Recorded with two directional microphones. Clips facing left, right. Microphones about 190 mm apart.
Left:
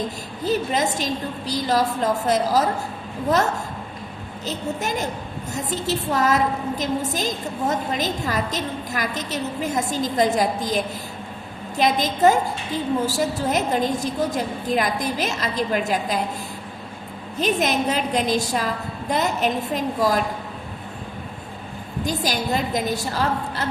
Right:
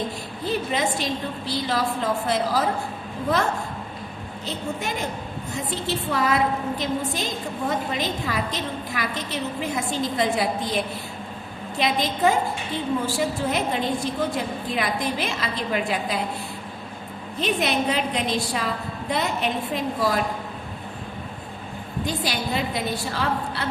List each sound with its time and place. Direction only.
0.4 s a woman's voice: 40° left (ahead or behind)
4.4 s a woman's voice: 40° left (ahead or behind)
11.8 s a woman's voice: 40° left (ahead or behind)
17.4 s a woman's voice: 45° left (ahead or behind)
22.0 s a woman's voice: 40° left (ahead or behind)